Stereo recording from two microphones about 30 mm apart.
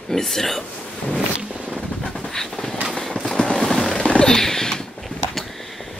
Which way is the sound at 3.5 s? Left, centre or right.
Centre.